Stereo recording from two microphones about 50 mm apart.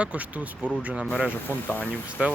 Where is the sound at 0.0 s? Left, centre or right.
Right.